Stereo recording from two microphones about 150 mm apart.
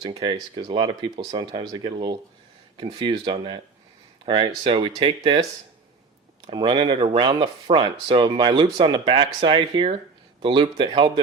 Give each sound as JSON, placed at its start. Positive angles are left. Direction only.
{"t": 0.0, "sound": "speech", "side_deg": -30}
{"t": 6.5, "sound": "speech", "side_deg": -35}